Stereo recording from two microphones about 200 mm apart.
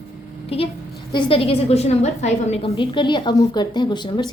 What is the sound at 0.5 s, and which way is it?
A woman's voice, 30° left (ahead or behind).